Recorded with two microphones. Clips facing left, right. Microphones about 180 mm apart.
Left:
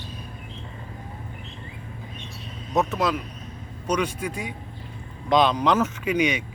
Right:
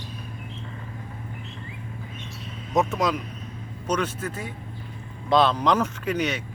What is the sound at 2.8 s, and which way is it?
Speech, centre (ahead or behind).